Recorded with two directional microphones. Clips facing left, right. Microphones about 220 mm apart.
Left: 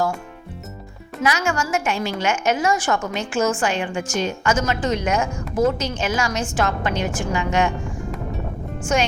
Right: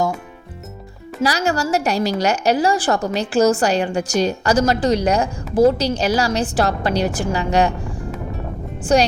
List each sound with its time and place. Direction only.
1.2 s a woman's voice: 35° right (ahead or behind)
8.8 s speech: 35° right (ahead or behind)